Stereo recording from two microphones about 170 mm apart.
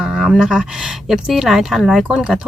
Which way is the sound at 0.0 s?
Centre (ahead or behind).